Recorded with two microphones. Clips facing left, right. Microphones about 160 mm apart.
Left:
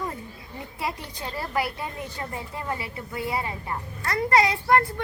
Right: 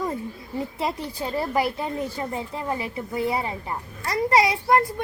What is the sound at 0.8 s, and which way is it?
A woman's voice, 20° right (ahead or behind).